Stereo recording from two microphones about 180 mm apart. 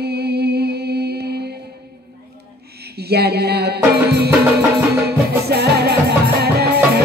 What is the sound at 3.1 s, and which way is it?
Music, 65° right (ahead or behind).